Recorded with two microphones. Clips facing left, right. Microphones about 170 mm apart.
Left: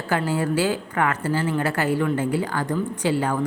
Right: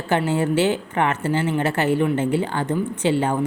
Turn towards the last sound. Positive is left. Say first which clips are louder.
# right 2 dB
turn(degrees=-25)  # may be behind; listen again after turning